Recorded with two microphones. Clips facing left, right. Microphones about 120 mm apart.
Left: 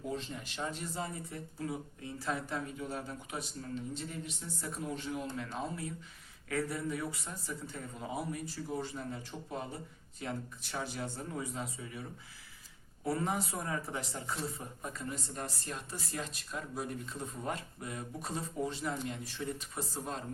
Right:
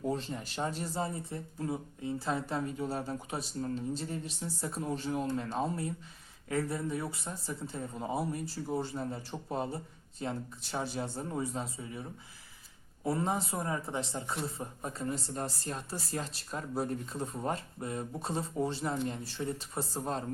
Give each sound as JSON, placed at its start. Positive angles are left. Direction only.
{"t": 0.1, "sound": "speech", "side_deg": -35}
{"t": 13.1, "sound": "speech", "side_deg": -25}